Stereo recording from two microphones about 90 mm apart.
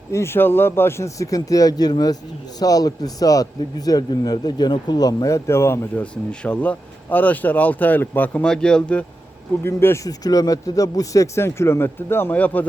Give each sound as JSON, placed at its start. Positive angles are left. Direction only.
{"t": 0.1, "sound": "a man's voice", "side_deg": 30}
{"t": 6.0, "sound": "speech", "side_deg": 15}
{"t": 9.6, "sound": "speech", "side_deg": 30}
{"t": 10.1, "sound": "speech", "side_deg": 45}